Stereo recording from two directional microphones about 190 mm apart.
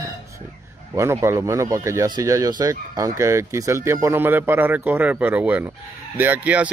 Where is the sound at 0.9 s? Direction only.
15° right (ahead or behind).